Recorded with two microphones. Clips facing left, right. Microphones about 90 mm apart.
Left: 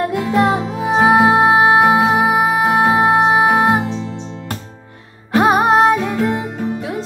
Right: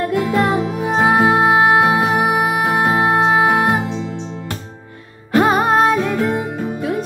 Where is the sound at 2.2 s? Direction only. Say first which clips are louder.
Left 2 dB; 35° left (ahead or behind).